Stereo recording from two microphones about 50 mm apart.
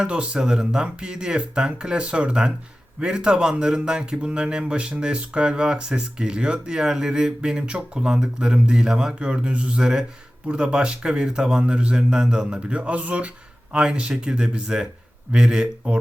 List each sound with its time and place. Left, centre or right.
0.0 s a man's voice: centre